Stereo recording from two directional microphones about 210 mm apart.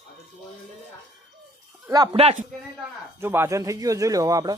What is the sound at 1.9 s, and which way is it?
Speech, 20° right (ahead or behind).